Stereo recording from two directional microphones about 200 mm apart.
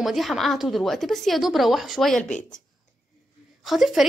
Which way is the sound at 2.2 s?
40° left (ahead or behind).